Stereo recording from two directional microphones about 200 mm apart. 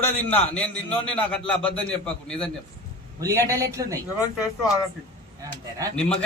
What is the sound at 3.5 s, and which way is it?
Speech, 15° right (ahead or behind).